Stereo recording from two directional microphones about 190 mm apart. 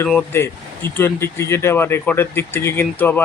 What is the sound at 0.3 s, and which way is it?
Speech, 15° left (ahead or behind).